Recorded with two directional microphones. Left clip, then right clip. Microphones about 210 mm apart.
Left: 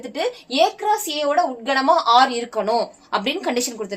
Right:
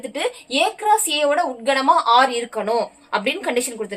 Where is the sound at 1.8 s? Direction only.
25° left (ahead or behind).